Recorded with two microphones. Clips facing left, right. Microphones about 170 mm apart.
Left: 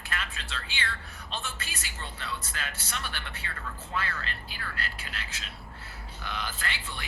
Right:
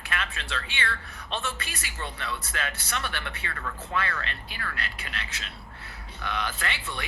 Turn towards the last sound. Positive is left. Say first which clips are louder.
# right 4 dB
turn(degrees=-70)  # may be behind; listen again after turning